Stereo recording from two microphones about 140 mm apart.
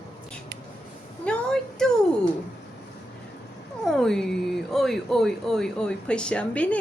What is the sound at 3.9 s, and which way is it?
Speech, 5° left (ahead or behind).